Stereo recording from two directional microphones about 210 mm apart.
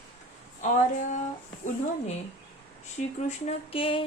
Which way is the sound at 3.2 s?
30° left (ahead or behind).